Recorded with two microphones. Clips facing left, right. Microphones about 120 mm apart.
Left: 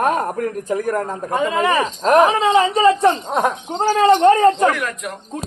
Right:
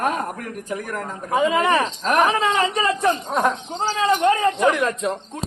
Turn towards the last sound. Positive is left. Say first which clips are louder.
# right 2 dB
turn(degrees=-25)  # may be behind; listen again after turning